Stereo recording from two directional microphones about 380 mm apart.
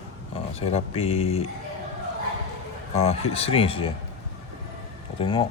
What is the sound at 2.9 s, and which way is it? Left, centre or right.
Speech, centre.